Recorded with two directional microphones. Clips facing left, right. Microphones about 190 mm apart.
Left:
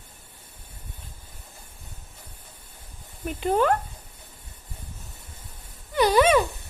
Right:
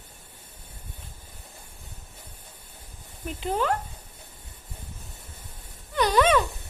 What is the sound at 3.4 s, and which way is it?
Speech, 50° left (ahead or behind).